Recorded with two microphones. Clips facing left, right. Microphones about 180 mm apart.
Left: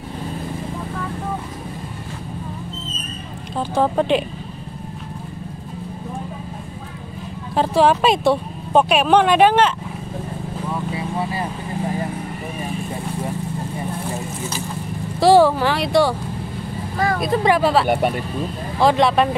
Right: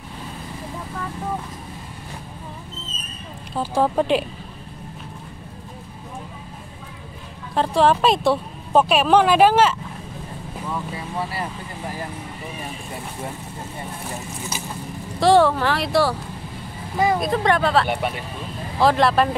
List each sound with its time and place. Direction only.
3.5 s speech: 5° right (ahead or behind)
7.5 s speech: 5° left (ahead or behind)
15.1 s speech: 5° left (ahead or behind)
17.2 s speech: 5° left (ahead or behind)
17.8 s speech: 45° left (ahead or behind)
18.8 s speech: centre (ahead or behind)